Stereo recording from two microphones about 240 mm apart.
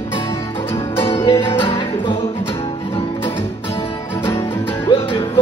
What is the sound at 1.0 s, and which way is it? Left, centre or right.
Music, centre.